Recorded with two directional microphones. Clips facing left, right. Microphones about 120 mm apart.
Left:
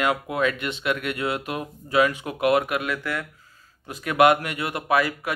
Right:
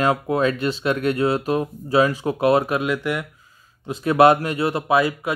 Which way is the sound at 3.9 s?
30° right (ahead or behind).